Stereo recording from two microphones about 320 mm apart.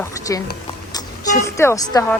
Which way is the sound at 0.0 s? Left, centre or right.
Centre.